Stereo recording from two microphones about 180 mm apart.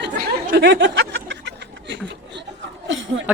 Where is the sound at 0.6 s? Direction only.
85° right.